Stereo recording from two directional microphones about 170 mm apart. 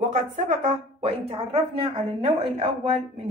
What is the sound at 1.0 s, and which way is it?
A woman's voice, 35° right (ahead or behind).